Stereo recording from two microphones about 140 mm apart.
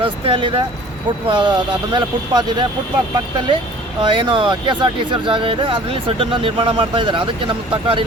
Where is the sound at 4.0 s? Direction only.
35° right (ahead or behind).